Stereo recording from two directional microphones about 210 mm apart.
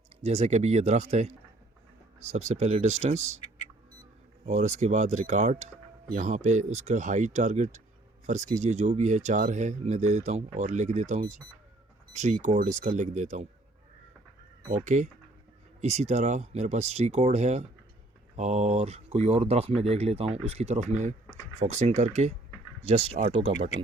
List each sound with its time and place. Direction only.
0.2 s speech: 30° right (ahead or behind)
4.4 s speech: 35° right (ahead or behind)
14.7 s speech: 35° right (ahead or behind)